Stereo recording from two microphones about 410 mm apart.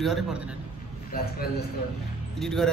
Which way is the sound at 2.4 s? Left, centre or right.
Centre.